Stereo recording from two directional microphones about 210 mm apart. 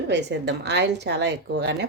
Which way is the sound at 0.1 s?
55° right (ahead or behind).